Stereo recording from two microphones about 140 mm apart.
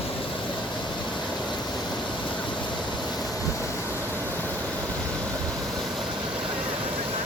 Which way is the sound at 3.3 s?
20° left (ahead or behind).